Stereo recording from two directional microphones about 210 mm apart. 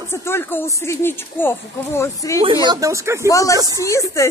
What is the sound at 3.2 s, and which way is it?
Speech, 15° left (ahead or behind).